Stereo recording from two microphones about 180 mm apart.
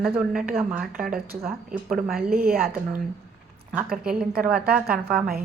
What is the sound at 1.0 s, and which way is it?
Speech, 55° right (ahead or behind).